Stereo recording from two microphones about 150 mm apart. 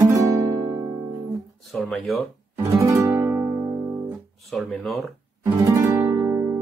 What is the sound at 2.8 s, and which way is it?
Music, 20° right (ahead or behind).